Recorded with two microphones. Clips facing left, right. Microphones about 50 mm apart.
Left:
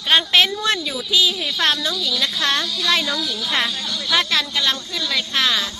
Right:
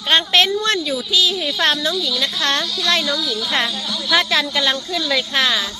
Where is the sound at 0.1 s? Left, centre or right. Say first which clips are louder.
Right 1 dB; centre.